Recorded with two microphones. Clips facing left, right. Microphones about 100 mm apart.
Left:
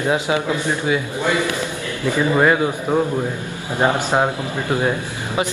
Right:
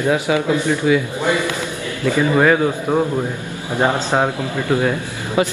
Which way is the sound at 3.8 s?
15° left (ahead or behind).